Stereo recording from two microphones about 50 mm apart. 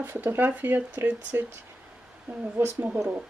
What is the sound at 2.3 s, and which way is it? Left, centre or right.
Speech, right.